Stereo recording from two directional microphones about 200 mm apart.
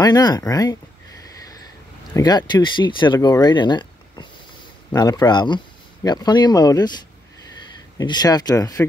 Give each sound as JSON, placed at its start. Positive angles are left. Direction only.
{"t": 0.0, "sound": "speech", "side_deg": 20}
{"t": 2.1, "sound": "speech", "side_deg": 20}
{"t": 8.0, "sound": "speech", "side_deg": 20}